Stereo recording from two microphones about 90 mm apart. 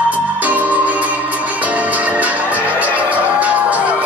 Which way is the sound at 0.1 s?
15° right (ahead or behind).